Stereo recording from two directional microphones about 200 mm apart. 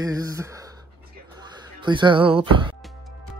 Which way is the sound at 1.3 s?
25° right (ahead or behind).